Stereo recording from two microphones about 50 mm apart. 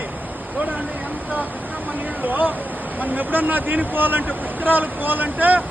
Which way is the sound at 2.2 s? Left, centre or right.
Right.